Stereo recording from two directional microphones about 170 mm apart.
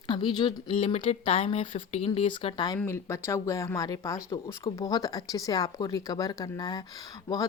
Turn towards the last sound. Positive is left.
turn(degrees=20)  # may be behind; listen again after turning